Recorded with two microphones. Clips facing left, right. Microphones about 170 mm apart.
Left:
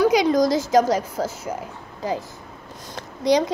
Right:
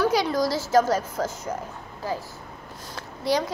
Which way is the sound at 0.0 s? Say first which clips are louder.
Left 5 dB; 15° left (ahead or behind).